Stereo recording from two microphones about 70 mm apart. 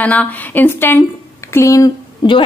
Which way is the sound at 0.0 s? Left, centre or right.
Left.